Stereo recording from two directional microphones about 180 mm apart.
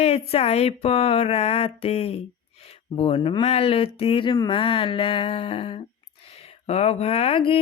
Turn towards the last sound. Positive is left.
turn(degrees=30)  # may be behind; listen again after turning